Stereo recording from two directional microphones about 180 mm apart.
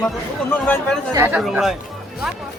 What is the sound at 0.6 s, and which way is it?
Speech, 5° left (ahead or behind).